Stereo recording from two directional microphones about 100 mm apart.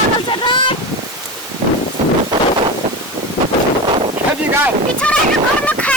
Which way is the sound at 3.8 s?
65° right (ahead or behind).